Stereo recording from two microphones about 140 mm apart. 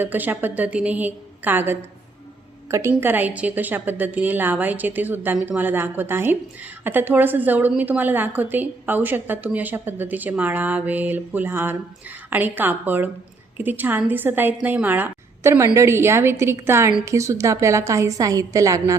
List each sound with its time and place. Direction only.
0.0 s a woman's voice: 15° right (ahead or behind)